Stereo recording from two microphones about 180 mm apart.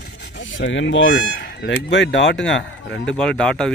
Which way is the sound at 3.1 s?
5° left (ahead or behind).